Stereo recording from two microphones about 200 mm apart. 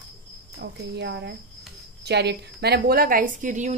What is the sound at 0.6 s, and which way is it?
A woman's voice, 60° right (ahead or behind).